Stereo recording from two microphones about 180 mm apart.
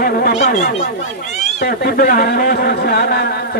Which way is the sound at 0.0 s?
55° left (ahead or behind).